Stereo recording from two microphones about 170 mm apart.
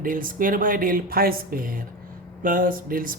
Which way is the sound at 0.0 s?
55° right (ahead or behind).